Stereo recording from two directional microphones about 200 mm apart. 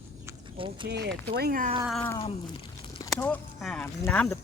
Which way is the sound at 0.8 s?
55° right (ahead or behind).